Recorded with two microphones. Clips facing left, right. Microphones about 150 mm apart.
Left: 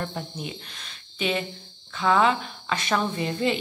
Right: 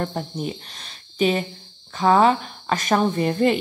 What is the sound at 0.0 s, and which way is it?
A woman's voice, 45° right (ahead or behind).